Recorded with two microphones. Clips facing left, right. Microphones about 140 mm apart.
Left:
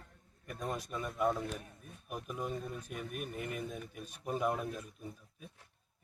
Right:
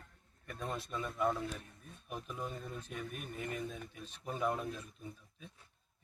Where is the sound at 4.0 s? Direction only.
10° left (ahead or behind).